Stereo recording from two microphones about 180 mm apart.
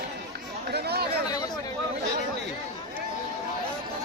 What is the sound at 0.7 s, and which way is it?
Chatter, 65° right (ahead or behind).